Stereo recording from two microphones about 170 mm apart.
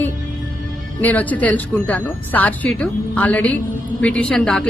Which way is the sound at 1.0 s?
10° left (ahead or behind).